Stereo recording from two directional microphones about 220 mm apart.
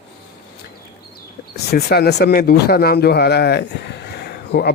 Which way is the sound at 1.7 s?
45° left (ahead or behind).